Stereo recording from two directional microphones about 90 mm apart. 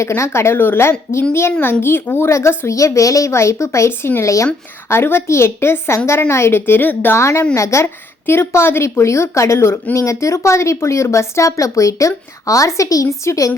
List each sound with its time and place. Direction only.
0.0 s a woman's voice: 30° left (ahead or behind)